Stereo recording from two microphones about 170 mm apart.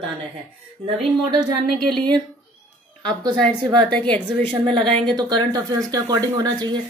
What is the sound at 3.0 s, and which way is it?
Speech, 25° right (ahead or behind).